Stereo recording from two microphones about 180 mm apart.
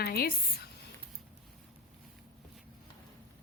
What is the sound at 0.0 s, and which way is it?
Speech, 60° left (ahead or behind).